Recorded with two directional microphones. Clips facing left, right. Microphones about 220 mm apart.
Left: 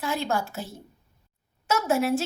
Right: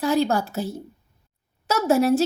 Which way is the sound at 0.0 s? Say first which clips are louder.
Right 7 dB; 40° right (ahead or behind).